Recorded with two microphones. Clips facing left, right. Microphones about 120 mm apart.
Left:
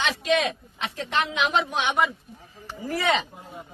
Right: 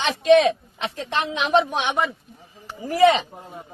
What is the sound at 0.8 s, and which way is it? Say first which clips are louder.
A woman's voice: right 1 dB; 30° right (ahead or behind).